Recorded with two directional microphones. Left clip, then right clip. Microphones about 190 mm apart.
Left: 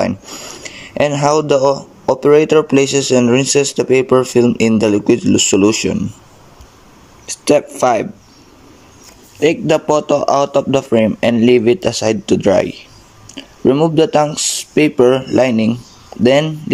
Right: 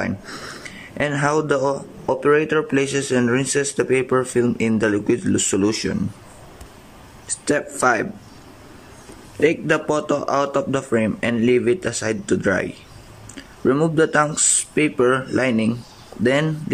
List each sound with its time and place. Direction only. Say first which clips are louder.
0.0 s speech: left 8 dB; 15° left (ahead or behind)
7.4 s speech: left 7 dB; 20° left (ahead or behind)
9.4 s speech: left 5 dB; 20° left (ahead or behind)